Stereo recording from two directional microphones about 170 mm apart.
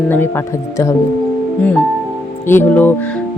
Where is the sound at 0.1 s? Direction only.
15° left (ahead or behind).